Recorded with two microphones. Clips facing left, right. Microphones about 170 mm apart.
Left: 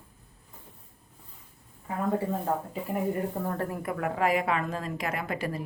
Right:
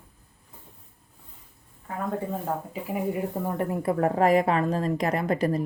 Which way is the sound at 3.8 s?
35° right (ahead or behind).